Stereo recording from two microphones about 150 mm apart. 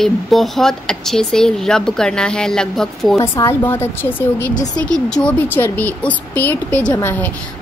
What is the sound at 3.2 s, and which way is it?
Speech, 20° left (ahead or behind).